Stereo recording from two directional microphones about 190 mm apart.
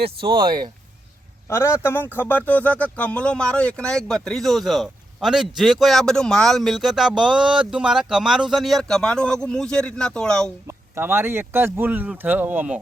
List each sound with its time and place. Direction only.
0.0 s speech: 25° right (ahead or behind)
1.5 s a man's voice: 15° left (ahead or behind)
10.7 s speech: 10° right (ahead or behind)